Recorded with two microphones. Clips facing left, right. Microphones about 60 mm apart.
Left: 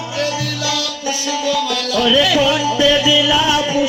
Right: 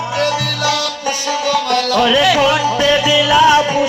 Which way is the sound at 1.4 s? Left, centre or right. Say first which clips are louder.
Right 4 dB; right.